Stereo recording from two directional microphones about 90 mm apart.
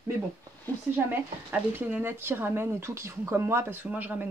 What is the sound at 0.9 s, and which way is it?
Speech, 25° right (ahead or behind).